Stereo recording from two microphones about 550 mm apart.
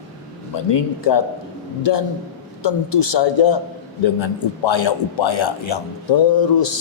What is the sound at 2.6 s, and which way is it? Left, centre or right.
A man's voice, left.